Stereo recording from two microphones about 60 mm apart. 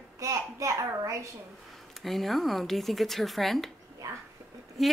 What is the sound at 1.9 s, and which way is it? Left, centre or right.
Speech, centre.